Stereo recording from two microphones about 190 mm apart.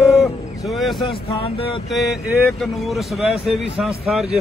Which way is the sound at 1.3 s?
30° left (ahead or behind).